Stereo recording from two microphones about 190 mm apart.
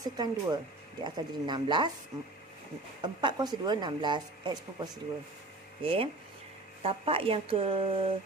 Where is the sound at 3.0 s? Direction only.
25° right (ahead or behind).